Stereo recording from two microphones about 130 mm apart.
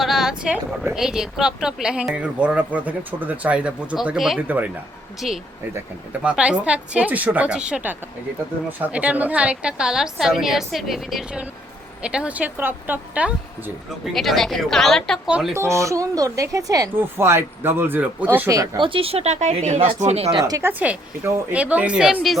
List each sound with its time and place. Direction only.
0.0 s speech: 5° right (ahead or behind)
5.2 s a woman's voice: centre (ahead or behind)
14.0 s a woman's voice: centre (ahead or behind)
15.5 s a woman's voice: 20° right (ahead or behind)
18.8 s speech: 45° right (ahead or behind)
20.4 s speech: 20° right (ahead or behind); by 22.4 s 5° right (ahead or behind)